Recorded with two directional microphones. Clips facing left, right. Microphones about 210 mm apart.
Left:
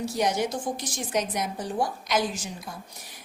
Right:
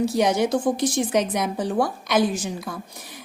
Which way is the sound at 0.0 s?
60° right (ahead or behind).